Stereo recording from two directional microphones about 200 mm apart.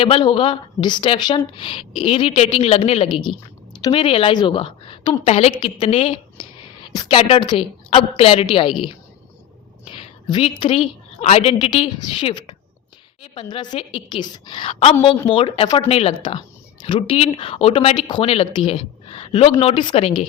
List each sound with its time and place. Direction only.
0.0 s a woman's voice: 25° left (ahead or behind)
9.9 s a woman's voice: 25° left (ahead or behind)